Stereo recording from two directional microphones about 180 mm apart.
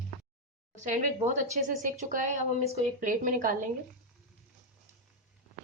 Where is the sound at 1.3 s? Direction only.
45° right (ahead or behind).